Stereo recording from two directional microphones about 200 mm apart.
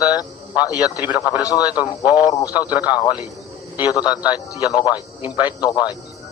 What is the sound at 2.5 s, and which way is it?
Speech, 10° right (ahead or behind).